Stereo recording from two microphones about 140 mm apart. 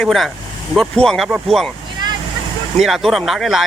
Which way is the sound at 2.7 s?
Centre (ahead or behind).